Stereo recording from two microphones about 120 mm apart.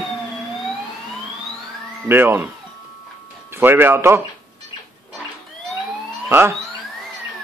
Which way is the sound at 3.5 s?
20° right (ahead or behind).